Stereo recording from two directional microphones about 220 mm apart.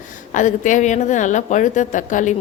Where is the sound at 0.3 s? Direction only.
35° left (ahead or behind).